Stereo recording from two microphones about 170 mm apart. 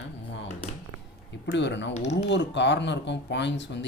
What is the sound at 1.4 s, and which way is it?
Speech, 90° left.